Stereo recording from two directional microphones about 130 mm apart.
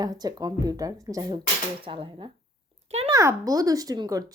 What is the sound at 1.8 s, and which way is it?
Speech, 45° right (ahead or behind).